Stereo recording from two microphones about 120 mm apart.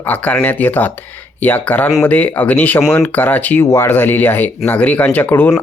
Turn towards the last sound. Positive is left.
turn(degrees=15)  # may be behind; listen again after turning